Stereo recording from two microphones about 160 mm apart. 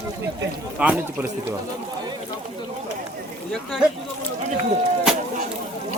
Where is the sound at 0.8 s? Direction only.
10° right (ahead or behind).